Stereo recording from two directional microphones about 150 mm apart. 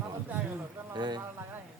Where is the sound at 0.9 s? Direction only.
30° right (ahead or behind).